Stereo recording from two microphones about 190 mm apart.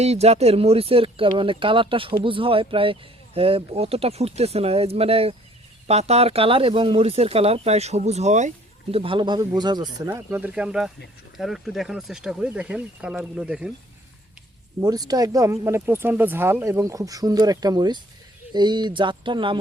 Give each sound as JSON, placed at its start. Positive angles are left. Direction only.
{"t": 0.0, "sound": "speech", "side_deg": -35}
{"t": 10.2, "sound": "speech", "side_deg": -10}
{"t": 14.8, "sound": "speech", "side_deg": -20}